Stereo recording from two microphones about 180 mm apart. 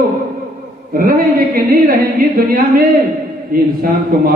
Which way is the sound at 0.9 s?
55° right (ahead or behind).